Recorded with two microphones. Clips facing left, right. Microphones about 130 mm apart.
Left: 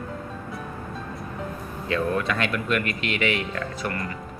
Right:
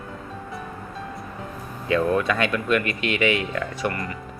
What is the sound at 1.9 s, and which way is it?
Speech, 20° right (ahead or behind).